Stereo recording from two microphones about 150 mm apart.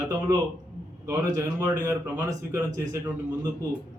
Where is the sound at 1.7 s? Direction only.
20° right (ahead or behind).